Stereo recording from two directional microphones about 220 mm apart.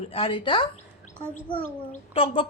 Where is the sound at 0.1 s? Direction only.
25° left (ahead or behind).